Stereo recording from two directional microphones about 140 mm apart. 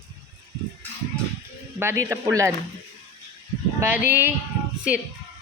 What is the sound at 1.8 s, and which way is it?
Speech, 20° right (ahead or behind).